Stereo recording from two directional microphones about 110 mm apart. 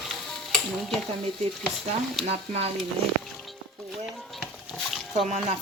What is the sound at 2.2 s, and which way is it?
Speech, 65° right (ahead or behind).